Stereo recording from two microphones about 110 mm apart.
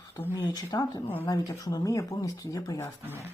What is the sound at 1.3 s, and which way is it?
Speech, 35° left (ahead or behind).